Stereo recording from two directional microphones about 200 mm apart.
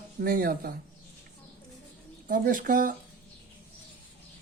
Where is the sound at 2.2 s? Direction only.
40° right (ahead or behind).